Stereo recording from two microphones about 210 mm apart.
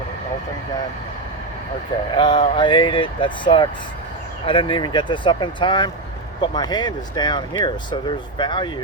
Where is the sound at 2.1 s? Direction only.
20° left (ahead or behind).